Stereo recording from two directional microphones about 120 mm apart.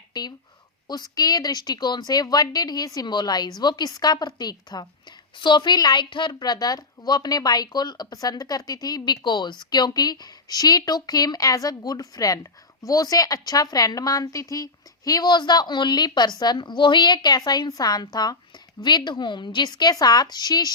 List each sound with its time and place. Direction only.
0.1 s a woman's voice: 35° left (ahead or behind)